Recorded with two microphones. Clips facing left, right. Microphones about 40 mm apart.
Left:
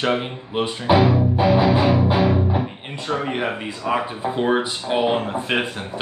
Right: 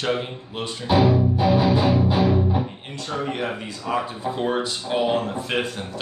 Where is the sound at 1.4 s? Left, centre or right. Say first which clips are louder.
Left 3 dB; left.